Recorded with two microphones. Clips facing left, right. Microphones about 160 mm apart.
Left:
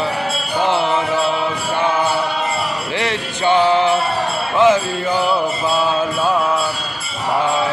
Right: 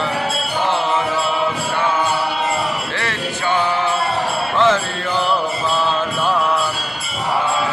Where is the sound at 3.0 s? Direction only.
20° left (ahead or behind).